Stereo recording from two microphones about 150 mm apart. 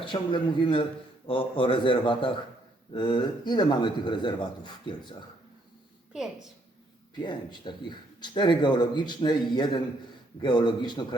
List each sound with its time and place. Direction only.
0.0 s a man's voice: 35° left (ahead or behind)
7.2 s a man's voice: 30° left (ahead or behind)